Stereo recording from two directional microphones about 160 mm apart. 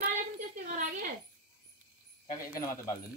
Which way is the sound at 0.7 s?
50° right (ahead or behind).